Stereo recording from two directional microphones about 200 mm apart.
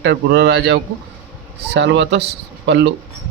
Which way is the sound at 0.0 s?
60° right (ahead or behind).